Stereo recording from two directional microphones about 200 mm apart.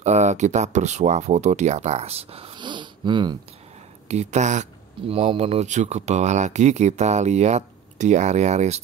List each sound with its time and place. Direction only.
0.0 s speech: 35° right (ahead or behind)
4.1 s speech: 35° right (ahead or behind)